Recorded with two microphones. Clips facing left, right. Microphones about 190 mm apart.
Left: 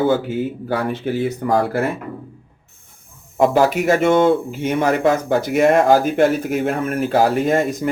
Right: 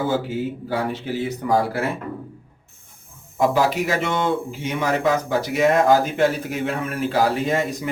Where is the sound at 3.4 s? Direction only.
50° left (ahead or behind).